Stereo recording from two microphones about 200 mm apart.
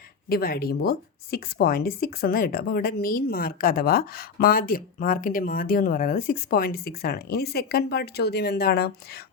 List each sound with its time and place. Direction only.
0.3 s speech: 50° left (ahead or behind)